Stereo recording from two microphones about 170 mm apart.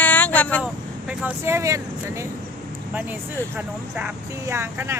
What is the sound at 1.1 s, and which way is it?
Speech, 5° right (ahead or behind).